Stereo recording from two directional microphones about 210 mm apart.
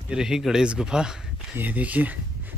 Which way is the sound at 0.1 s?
5° right (ahead or behind).